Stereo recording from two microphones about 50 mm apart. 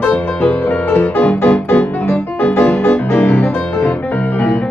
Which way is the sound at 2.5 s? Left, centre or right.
Left.